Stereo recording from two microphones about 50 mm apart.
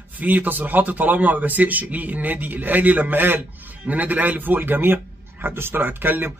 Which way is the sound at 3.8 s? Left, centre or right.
Right.